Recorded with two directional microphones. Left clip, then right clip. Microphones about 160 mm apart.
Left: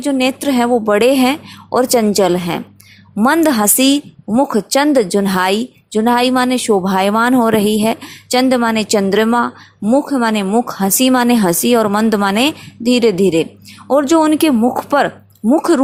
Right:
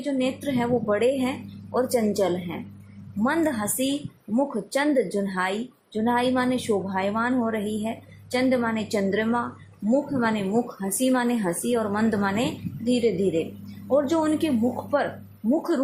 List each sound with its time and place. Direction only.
0.0 s a woman's voice: 60° left (ahead or behind)